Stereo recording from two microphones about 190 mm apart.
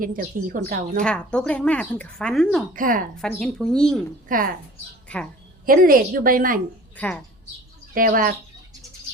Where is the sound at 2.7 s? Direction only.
45° right (ahead or behind).